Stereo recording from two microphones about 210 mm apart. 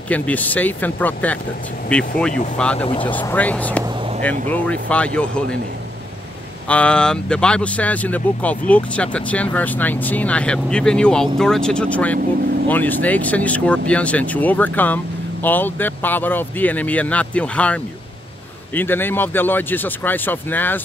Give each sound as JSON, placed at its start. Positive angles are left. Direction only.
{"t": 0.1, "sound": "speech", "side_deg": 5}
{"t": 2.8, "sound": "speech", "side_deg": 25}
{"t": 3.1, "sound": "speech", "side_deg": 10}
{"t": 6.7, "sound": "speech", "side_deg": 5}
{"t": 18.8, "sound": "speech", "side_deg": 10}